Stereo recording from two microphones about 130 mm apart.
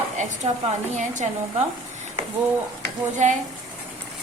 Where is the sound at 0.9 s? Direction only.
65° right (ahead or behind).